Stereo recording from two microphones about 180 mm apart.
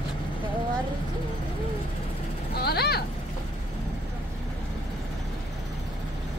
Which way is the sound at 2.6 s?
60° left (ahead or behind).